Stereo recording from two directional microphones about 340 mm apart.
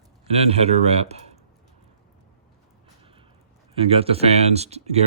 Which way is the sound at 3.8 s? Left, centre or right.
Centre.